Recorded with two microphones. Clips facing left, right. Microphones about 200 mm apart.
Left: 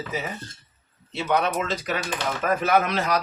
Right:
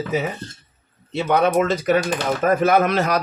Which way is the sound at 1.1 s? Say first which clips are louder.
Right 6 dB; 50° right (ahead or behind).